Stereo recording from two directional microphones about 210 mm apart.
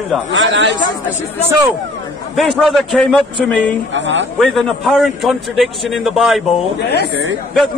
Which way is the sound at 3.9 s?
60° right (ahead or behind).